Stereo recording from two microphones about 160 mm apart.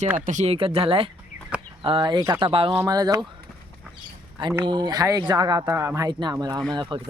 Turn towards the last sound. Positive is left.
turn(degrees=-30)  # may be behind; listen again after turning